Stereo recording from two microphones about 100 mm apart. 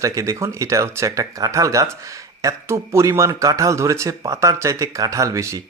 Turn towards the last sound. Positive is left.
turn(degrees=-30)  # may be behind; listen again after turning